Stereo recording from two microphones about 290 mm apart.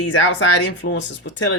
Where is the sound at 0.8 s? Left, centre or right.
Left.